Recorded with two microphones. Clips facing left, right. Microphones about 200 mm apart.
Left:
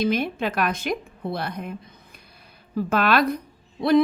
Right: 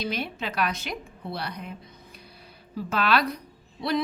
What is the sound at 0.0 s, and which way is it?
A woman's voice, 50° left (ahead or behind).